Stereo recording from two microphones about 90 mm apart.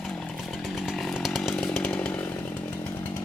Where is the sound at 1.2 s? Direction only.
Centre (ahead or behind).